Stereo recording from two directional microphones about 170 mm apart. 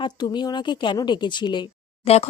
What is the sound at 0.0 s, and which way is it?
A woman's voice, 25° left (ahead or behind).